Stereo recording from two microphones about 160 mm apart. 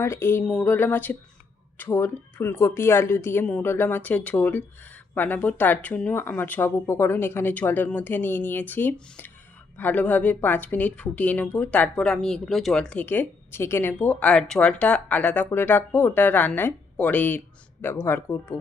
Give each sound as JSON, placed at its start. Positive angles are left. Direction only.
{"t": 0.0, "sound": "a woman's voice", "side_deg": 15}